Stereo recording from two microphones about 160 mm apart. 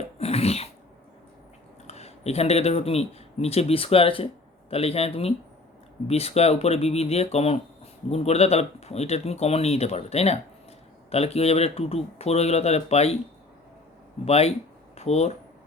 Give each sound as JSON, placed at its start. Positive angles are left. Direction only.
{"t": 0.2, "sound": "cough", "side_deg": 40}
{"t": 1.9, "sound": "speech", "side_deg": 40}
{"t": 14.3, "sound": "speech", "side_deg": 40}